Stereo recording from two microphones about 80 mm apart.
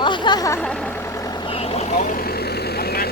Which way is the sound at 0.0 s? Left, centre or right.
Left.